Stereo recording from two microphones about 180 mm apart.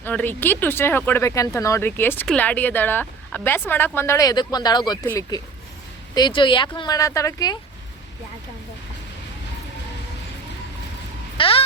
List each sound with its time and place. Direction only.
0.0 s speech: 10° left (ahead or behind)
11.3 s speech: 30° left (ahead or behind)